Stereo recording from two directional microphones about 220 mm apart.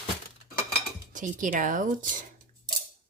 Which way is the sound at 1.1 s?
35° right (ahead or behind).